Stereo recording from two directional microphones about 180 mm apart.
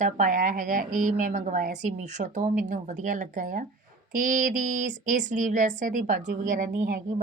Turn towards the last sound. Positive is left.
turn(degrees=-45)  # may be behind; listen again after turning